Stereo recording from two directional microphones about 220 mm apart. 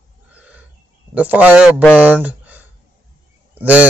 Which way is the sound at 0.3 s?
5° right (ahead or behind).